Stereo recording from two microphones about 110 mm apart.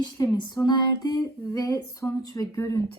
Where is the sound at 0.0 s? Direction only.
35° left (ahead or behind).